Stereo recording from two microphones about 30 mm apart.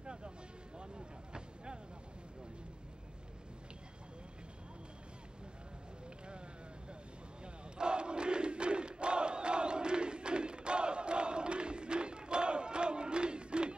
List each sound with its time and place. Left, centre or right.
0.0 s vehicle: right
7.4 s battle cry: right